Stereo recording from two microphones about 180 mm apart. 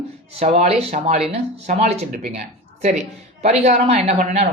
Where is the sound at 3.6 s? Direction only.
35° right (ahead or behind).